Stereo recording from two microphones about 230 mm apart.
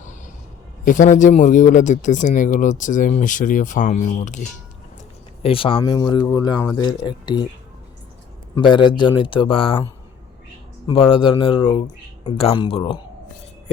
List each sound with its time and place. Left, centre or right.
0.9 s speech: left
8.5 s speech: centre
10.8 s speech: left